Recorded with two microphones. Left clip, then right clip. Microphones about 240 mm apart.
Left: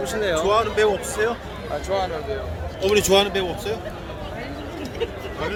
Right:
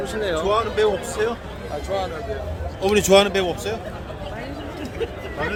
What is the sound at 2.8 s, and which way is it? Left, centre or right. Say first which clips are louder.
Speech: right 2 dB; right.